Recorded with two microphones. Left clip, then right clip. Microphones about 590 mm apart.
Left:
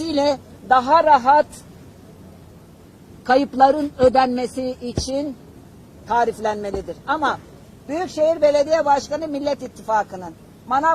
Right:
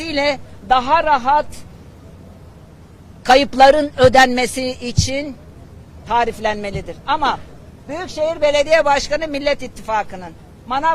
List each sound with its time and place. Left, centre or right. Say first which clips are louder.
0.1 s speech: right 1 dB; right
3.4 s speech: right 5 dB; right